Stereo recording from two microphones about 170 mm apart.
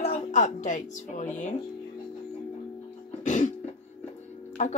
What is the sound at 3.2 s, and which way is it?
Music, 45° left (ahead or behind).